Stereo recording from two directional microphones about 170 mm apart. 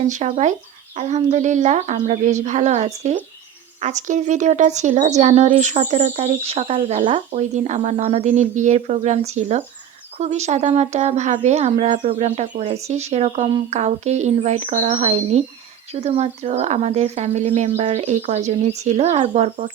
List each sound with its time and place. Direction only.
0.0 s speech: 45° right (ahead or behind)